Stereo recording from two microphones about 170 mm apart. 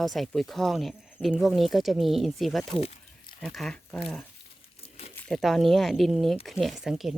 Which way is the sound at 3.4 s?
Centre (ahead or behind).